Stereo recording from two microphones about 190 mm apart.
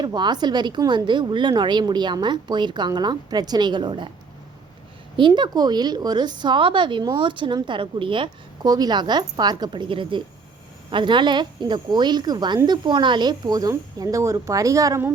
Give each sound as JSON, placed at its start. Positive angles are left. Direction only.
{"t": 0.0, "sound": "a woman's voice", "side_deg": -20}
{"t": 5.1, "sound": "a woman's voice", "side_deg": -25}